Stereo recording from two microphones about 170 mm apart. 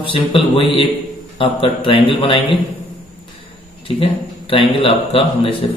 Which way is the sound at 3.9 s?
30° left (ahead or behind).